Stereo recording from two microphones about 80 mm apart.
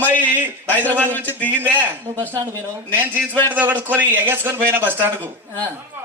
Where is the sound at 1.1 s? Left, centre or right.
Left.